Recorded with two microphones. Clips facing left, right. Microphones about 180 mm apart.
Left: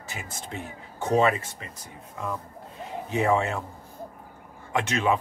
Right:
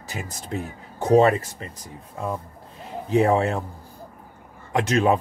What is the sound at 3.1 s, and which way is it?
Speech, 35° right (ahead or behind).